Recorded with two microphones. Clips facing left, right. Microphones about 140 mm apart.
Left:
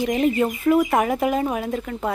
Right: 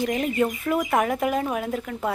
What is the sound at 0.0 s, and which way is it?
Speech, 5° left (ahead or behind).